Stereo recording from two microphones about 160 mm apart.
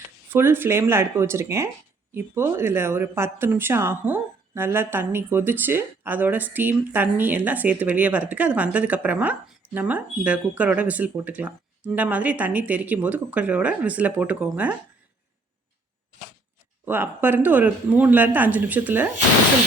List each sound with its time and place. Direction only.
0.3 s speech: 15° right (ahead or behind)
16.8 s speech: 15° right (ahead or behind)